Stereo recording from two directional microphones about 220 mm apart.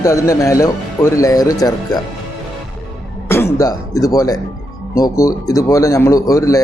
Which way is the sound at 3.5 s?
15° left (ahead or behind).